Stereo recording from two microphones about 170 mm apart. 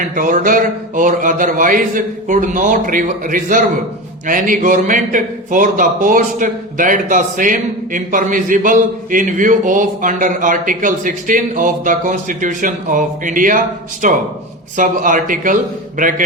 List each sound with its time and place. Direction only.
0.2 s a man's voice: 50° right (ahead or behind)